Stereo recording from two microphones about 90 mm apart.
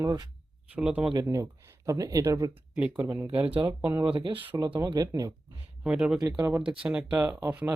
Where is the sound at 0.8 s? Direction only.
15° right (ahead or behind).